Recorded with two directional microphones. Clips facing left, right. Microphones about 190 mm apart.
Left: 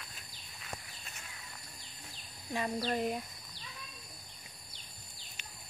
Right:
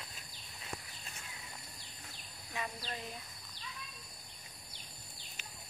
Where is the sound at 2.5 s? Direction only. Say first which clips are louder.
Left 9 dB; 45° left (ahead or behind).